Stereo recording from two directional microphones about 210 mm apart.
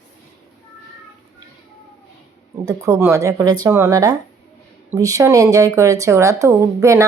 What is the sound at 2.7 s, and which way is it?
Speech, 15° right (ahead or behind).